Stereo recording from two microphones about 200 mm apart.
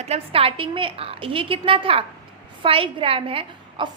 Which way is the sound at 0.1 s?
30° right (ahead or behind).